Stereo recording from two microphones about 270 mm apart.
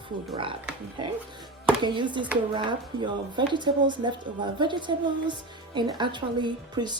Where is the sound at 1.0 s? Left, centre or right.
Centre.